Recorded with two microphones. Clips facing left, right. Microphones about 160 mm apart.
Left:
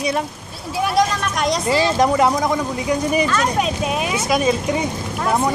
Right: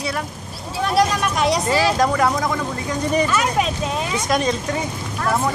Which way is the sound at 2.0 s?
20° left (ahead or behind).